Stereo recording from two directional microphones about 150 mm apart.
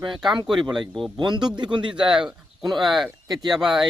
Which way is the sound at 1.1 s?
30° right (ahead or behind).